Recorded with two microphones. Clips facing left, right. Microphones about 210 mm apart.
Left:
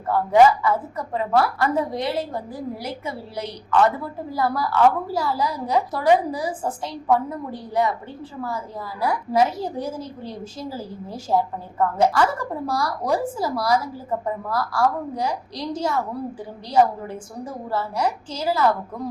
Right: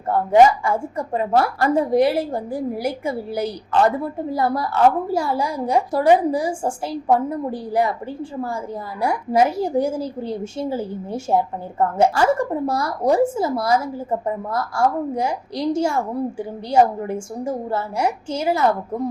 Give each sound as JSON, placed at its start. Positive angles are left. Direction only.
{"t": 0.1, "sound": "a woman's voice", "side_deg": -25}
{"t": 9.0, "sound": "a woman's voice", "side_deg": -25}